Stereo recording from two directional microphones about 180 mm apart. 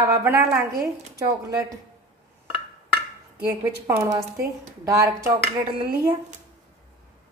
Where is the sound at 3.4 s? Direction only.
15° right (ahead or behind).